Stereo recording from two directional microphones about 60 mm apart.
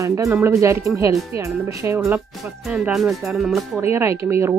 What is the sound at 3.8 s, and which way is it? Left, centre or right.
Speech, right.